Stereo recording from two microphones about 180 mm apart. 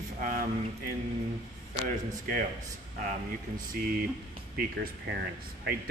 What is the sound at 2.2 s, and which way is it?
Speech, 50° right (ahead or behind).